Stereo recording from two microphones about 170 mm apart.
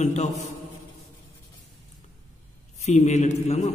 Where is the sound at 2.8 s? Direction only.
45° left (ahead or behind).